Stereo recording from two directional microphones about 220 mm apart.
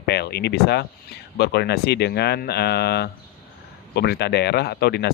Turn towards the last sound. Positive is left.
turn(degrees=50)  # may be behind; listen again after turning